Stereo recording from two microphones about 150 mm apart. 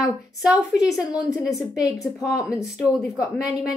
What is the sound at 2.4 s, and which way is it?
Speech, 20° left (ahead or behind).